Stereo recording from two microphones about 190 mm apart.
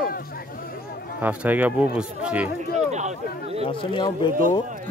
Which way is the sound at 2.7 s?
35° right (ahead or behind).